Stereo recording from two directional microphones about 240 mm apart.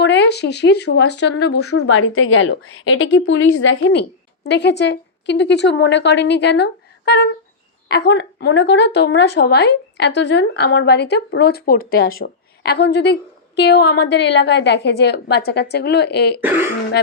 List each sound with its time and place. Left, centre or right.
0.0 s a woman's voice: left
1.5 s a woman's voice: left
16.4 s speech: centre